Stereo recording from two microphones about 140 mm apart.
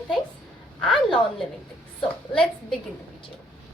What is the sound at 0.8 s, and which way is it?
Speech, 5° left (ahead or behind).